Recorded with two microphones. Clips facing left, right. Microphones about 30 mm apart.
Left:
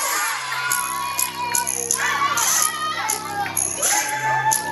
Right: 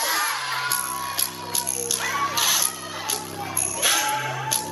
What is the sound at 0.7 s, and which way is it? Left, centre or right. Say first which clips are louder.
Music: left 4 dB; left.